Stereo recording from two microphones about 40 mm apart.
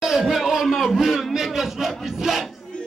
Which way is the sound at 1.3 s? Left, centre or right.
Centre.